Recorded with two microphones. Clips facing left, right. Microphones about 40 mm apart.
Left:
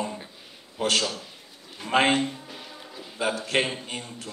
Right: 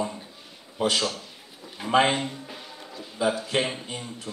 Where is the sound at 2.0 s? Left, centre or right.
Centre.